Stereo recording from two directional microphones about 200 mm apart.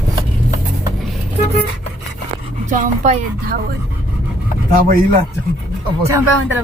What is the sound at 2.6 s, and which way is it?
Speech, 40° right (ahead or behind).